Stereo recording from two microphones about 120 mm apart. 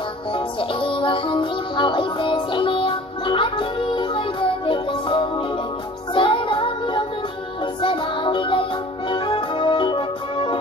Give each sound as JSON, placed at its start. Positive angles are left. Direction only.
{"t": 0.3, "sound": "music", "side_deg": 45}